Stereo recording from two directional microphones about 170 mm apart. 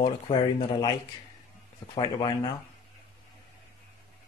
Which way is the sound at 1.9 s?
25° left (ahead or behind).